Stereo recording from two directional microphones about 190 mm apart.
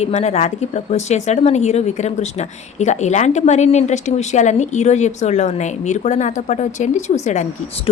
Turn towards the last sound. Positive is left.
turn(degrees=40)  # may be behind; listen again after turning